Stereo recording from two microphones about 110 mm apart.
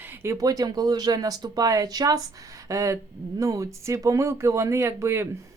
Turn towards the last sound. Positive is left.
turn(degrees=-25)  # may be behind; listen again after turning